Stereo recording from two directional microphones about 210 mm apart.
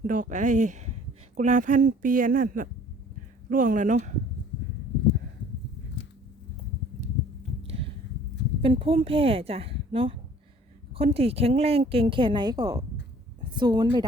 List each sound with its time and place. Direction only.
0.1 s speech: 35° right (ahead or behind)
7.6 s a sound: 25° right (ahead or behind)
8.6 s a woman's voice: 25° right (ahead or behind)